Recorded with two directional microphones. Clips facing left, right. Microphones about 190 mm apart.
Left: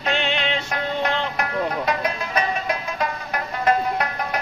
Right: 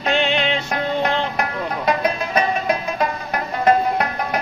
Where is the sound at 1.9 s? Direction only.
30° right (ahead or behind).